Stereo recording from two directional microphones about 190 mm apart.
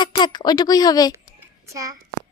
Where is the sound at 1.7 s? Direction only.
15° right (ahead or behind).